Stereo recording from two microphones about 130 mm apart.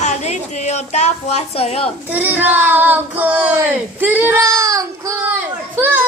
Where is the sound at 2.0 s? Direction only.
15° right (ahead or behind).